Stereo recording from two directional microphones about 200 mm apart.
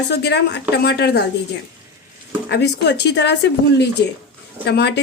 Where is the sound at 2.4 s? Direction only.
55° left (ahead or behind).